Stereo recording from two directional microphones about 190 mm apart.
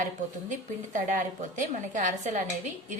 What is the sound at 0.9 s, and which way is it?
A woman's voice, 40° right (ahead or behind).